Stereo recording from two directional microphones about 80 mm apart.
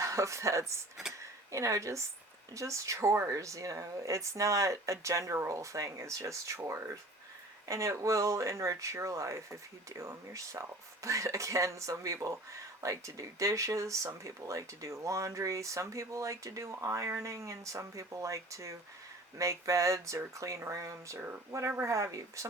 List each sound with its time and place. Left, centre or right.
0.0 s a woman's voice: right
21.2 s speech: right